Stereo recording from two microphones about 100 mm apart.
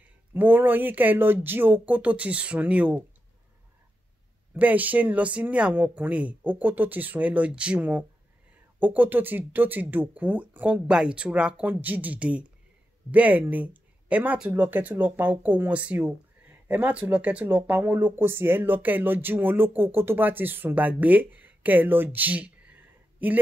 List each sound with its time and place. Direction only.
0.3 s speech: 20° right (ahead or behind)
4.6 s speech: 15° right (ahead or behind)